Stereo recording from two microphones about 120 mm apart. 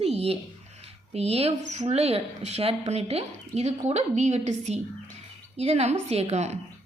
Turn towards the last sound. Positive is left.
turn(degrees=-65)  # may be behind; listen again after turning